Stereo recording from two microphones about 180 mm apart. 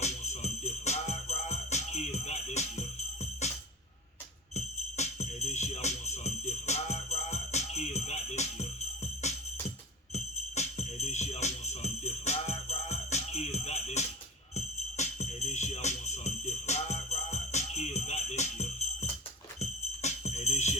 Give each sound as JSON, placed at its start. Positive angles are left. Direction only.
{"t": 0.0, "sound": "jingle bell", "side_deg": 40}
{"t": 4.5, "sound": "jingle bell", "side_deg": 40}
{"t": 9.2, "sound": "music", "side_deg": 40}